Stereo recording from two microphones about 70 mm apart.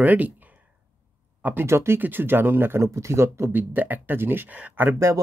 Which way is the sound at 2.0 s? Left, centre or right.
Right.